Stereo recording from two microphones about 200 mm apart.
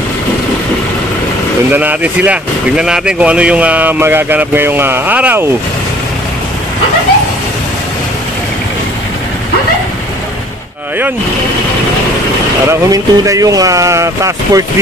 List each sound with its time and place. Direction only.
1.7 s speech: 10° right (ahead or behind)
12.6 s speech: 15° right (ahead or behind)